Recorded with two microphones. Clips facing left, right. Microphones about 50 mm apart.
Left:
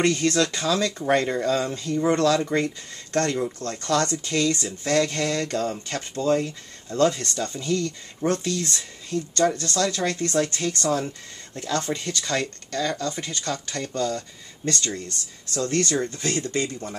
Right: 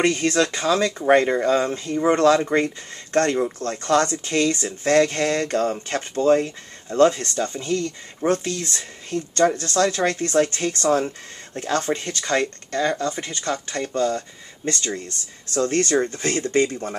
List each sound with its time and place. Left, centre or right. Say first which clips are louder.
0.0 s speech: right 2 dB; right
8.7 s speech: right 1 dB; right
15.5 s speech: right 4 dB; right